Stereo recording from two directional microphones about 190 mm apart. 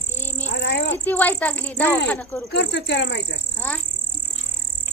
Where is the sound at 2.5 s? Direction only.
65° left (ahead or behind).